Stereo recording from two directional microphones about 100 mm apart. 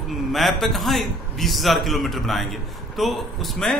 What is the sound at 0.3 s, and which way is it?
A man's voice, centre (ahead or behind).